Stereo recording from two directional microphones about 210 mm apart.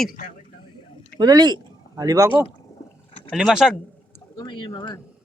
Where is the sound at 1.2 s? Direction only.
20° right (ahead or behind).